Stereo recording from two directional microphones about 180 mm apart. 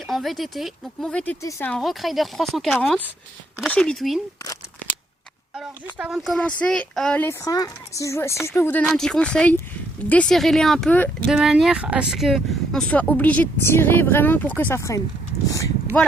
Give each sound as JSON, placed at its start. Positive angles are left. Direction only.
{"t": 0.1, "sound": "speech", "side_deg": 0}
{"t": 5.5, "sound": "speech", "side_deg": -5}
{"t": 7.4, "sound": "speech", "side_deg": 20}